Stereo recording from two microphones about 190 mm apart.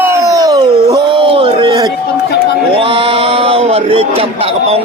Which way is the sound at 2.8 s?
30° right (ahead or behind).